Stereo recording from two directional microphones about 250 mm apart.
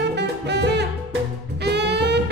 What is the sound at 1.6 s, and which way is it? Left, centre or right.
Saxophone, right.